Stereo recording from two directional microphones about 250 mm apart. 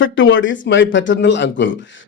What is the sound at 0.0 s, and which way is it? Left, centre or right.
A man's voice, left.